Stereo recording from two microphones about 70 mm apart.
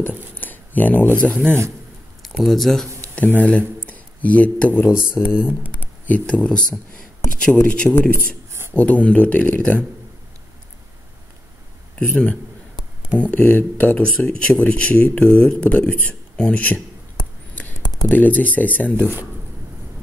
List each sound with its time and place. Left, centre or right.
0.3 s speech: left
2.4 s speech: centre
3.2 s speech: left
3.8 s a sound: left
5.2 s speech: left
8.5 s a sound: right
8.7 s speech: left
11.9 s speech: centre
18.0 s speech: left